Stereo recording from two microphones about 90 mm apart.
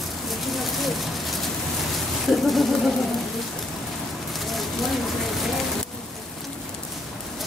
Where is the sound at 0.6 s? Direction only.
Centre (ahead or behind).